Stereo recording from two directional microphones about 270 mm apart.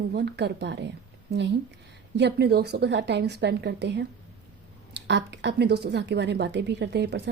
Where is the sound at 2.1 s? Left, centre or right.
Right.